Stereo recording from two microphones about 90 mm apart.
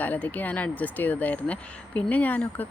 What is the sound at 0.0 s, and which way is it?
Speech, 20° left (ahead or behind).